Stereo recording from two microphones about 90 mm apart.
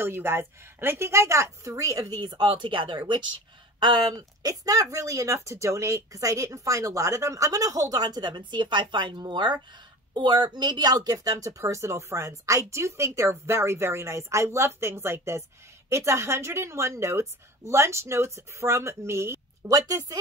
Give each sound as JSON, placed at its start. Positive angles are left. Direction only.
{"t": 0.0, "sound": "speech", "side_deg": -25}
{"t": 4.1, "sound": "speech", "side_deg": -40}
{"t": 19.7, "sound": "speech", "side_deg": -45}